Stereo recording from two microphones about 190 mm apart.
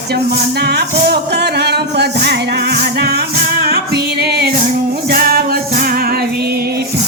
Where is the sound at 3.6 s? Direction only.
55° right (ahead or behind).